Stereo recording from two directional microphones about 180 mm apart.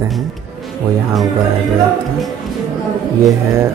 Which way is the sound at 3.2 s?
15° right (ahead or behind).